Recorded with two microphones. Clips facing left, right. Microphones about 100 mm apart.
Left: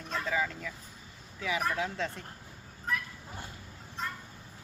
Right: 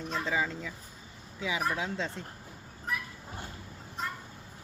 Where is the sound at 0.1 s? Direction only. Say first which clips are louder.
Even; 20° right (ahead or behind).